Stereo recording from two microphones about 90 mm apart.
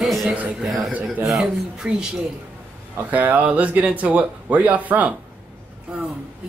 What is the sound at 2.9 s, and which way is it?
Speech, 20° right (ahead or behind).